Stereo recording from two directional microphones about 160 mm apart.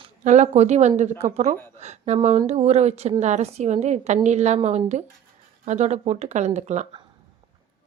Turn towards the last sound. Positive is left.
turn(degrees=-45)  # may be behind; listen again after turning